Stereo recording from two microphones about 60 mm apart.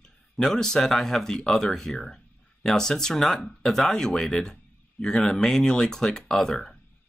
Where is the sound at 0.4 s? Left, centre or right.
Centre.